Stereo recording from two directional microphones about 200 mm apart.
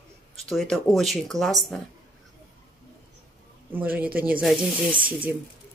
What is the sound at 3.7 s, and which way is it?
Speech, 10° right (ahead or behind).